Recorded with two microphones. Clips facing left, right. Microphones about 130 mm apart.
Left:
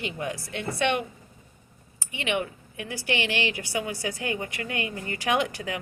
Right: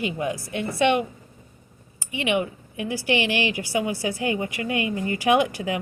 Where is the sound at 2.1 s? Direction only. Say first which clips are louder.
Right 5 dB; 15° right (ahead or behind).